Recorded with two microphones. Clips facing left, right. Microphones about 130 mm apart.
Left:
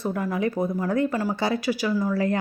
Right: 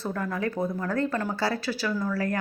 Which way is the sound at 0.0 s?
15° left (ahead or behind).